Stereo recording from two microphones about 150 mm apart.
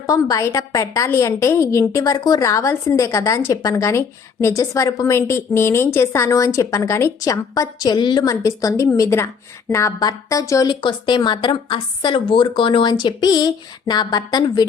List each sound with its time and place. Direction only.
0.0 s a woman's voice: 25° left (ahead or behind)